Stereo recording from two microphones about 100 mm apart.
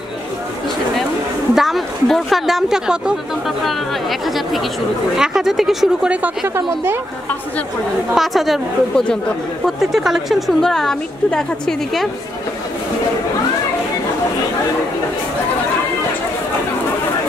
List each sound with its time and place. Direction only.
1.5 s a woman's voice: centre (ahead or behind)
5.1 s speech: 5° right (ahead or behind)
6.2 s speech: 25° right (ahead or behind)
8.1 s a woman's voice: centre (ahead or behind)